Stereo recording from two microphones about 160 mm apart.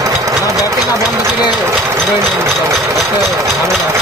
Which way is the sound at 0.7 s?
20° right (ahead or behind).